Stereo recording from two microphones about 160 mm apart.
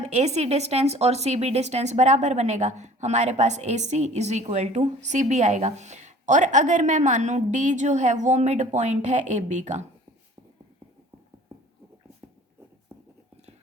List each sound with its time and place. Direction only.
0.0 s speech: 45° right (ahead or behind)